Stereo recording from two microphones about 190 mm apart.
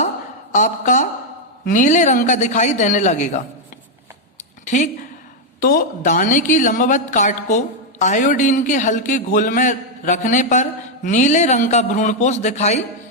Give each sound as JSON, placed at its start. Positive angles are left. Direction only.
{"t": 0.5, "sound": "a woman's voice", "side_deg": 40}
{"t": 4.6, "sound": "a woman's voice", "side_deg": 40}